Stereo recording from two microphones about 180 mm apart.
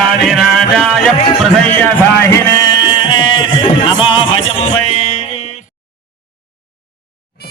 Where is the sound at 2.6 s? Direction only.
25° left (ahead or behind).